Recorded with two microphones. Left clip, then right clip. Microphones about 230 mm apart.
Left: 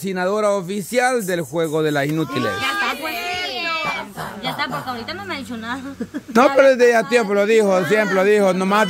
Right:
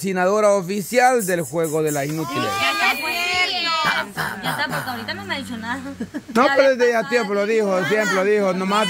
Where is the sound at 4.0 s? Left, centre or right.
Right.